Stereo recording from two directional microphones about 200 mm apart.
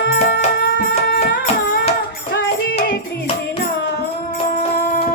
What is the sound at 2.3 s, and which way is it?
Music, 50° left (ahead or behind).